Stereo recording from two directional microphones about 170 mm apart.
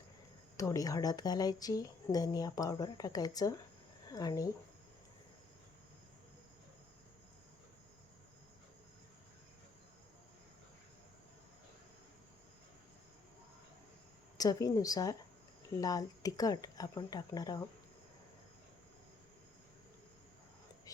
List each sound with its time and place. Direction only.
0.5 s speech: 20° left (ahead or behind)
14.3 s speech: 20° left (ahead or behind)